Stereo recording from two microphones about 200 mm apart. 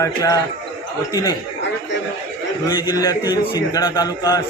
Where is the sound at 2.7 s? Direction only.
15° left (ahead or behind).